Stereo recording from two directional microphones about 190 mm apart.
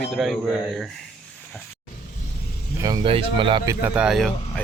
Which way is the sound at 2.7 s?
20° right (ahead or behind).